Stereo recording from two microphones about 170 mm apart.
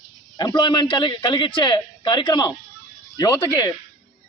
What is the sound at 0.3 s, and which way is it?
A man's voice, 25° left (ahead or behind).